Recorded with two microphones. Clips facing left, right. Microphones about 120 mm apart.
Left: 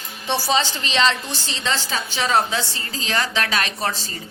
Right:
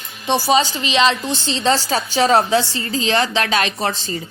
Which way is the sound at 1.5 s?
30° right (ahead or behind).